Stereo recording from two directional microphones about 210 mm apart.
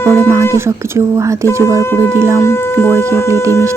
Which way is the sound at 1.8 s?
10° left (ahead or behind).